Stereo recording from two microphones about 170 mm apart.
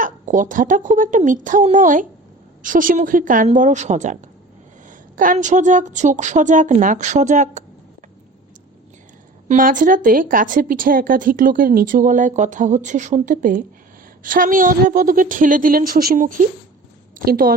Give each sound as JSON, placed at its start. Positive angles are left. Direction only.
{"t": 0.0, "sound": "a woman's voice", "side_deg": -50}
{"t": 9.5, "sound": "a woman's voice", "side_deg": -50}